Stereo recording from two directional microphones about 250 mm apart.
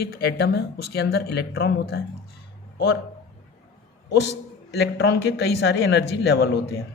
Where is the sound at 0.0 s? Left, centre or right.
Left.